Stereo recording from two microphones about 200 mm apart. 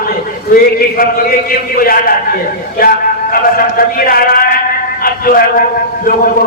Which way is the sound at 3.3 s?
45° left (ahead or behind).